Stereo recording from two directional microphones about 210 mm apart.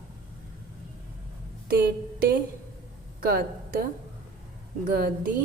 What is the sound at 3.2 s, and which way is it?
A woman's voice, 45° right (ahead or behind).